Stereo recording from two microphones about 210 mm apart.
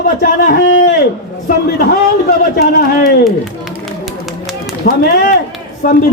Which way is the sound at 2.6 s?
45° left (ahead or behind).